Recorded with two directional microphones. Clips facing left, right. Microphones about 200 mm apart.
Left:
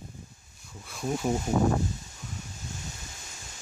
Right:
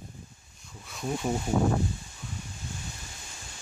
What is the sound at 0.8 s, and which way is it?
Speech, 5° left (ahead or behind).